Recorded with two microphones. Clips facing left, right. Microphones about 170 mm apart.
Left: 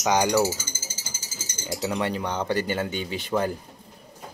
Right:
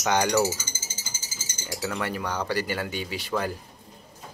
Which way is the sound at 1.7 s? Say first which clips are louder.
Left 3 dB; 20° left (ahead or behind).